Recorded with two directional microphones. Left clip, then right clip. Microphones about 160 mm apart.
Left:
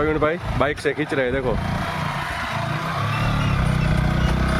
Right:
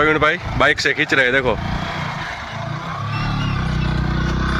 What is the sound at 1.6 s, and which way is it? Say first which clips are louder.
Vehicle: right 1 dB; 45° left (ahead or behind).